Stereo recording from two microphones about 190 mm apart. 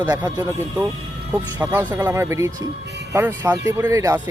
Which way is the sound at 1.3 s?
15° right (ahead or behind).